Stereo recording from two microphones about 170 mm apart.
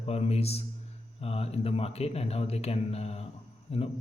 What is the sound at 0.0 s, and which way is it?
Speech, 35° left (ahead or behind).